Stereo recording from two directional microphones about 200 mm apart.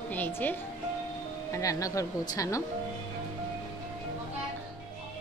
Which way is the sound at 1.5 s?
15° left (ahead or behind).